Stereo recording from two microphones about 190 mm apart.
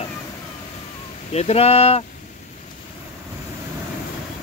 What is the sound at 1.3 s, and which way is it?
Speech, 35° left (ahead or behind).